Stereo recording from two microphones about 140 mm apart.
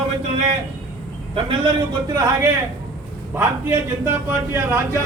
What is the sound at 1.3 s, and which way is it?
Speech, 40° right (ahead or behind).